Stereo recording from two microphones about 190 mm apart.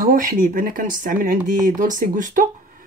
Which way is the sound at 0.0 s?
45° right (ahead or behind).